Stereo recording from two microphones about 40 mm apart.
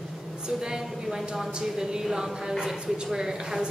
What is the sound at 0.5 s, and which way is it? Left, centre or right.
A woman's voice, centre.